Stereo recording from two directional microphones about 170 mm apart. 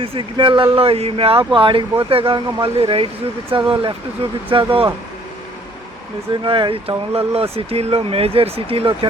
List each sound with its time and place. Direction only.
0.0 s speech: 30° right (ahead or behind)
6.4 s speech: 30° right (ahead or behind)